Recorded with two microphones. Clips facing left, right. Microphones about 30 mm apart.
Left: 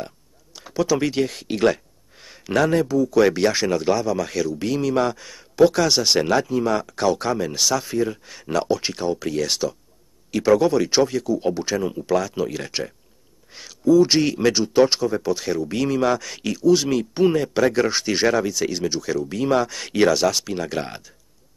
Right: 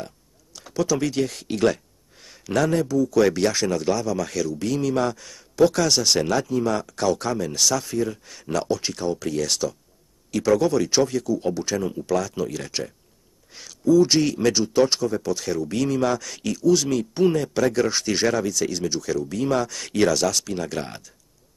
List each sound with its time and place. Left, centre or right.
0.0 s speech: centre